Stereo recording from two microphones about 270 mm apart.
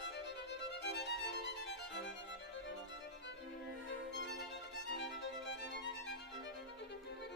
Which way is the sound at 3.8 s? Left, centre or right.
Left.